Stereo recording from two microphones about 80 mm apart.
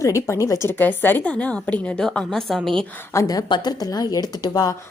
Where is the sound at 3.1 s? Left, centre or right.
Left.